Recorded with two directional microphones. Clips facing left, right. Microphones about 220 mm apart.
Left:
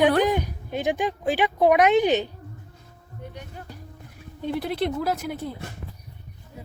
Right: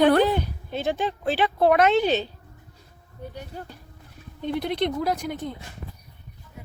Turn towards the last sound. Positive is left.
turn(degrees=5)  # may be behind; listen again after turning